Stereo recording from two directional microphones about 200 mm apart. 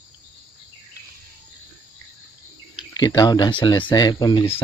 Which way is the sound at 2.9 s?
20° left (ahead or behind).